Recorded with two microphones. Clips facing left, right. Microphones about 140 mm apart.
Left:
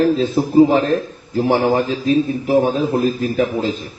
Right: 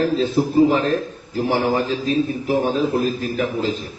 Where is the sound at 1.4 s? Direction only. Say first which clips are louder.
Left 4 dB; 40° left (ahead or behind).